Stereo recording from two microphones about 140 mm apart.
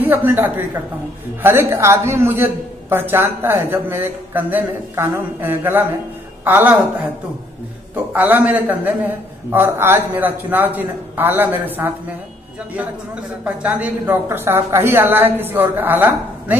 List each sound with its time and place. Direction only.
0.0 s a man's voice: 15° right (ahead or behind)
7.9 s a man's voice: 15° right (ahead or behind)